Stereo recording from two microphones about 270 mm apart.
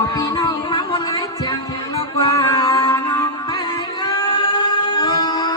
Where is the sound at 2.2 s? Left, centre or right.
Centre.